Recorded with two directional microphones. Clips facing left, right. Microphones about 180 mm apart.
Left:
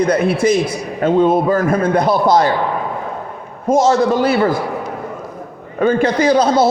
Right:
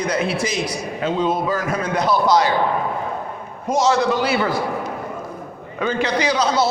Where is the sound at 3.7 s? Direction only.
50° left (ahead or behind).